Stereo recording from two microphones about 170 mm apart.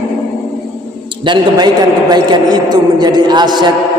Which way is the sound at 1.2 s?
25° right (ahead or behind).